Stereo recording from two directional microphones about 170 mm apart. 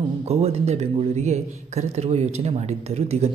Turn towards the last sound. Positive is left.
turn(degrees=-40)  # may be behind; listen again after turning